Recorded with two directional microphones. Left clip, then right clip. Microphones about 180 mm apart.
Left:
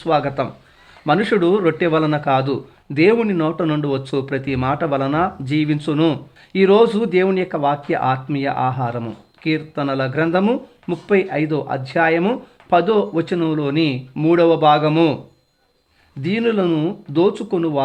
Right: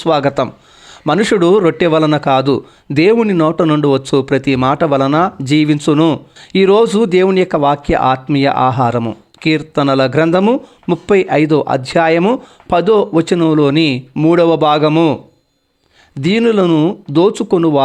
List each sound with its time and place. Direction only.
0.0 s a man's voice: 35° right (ahead or behind)
14.1 s speech: 25° right (ahead or behind)
14.3 s a man's voice: 35° right (ahead or behind)
16.2 s a man's voice: 35° right (ahead or behind)